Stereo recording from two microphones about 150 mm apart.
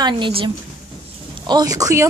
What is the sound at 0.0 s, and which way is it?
Speech, 35° right (ahead or behind).